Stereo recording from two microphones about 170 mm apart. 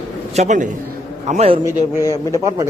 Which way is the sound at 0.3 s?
45° right (ahead or behind).